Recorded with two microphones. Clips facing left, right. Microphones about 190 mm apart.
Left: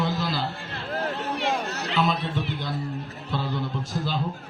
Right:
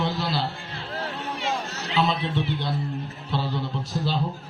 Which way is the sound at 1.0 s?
60° left (ahead or behind).